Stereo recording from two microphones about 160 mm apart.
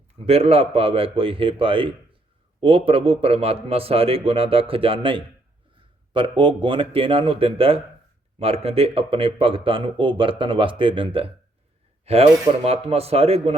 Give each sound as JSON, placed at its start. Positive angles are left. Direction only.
{"t": 0.3, "sound": "speech", "side_deg": -40}